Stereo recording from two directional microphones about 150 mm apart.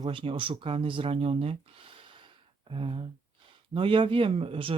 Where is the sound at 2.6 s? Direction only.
35° right (ahead or behind).